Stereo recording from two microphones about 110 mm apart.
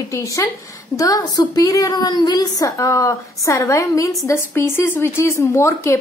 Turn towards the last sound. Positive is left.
turn(degrees=25)  # may be behind; listen again after turning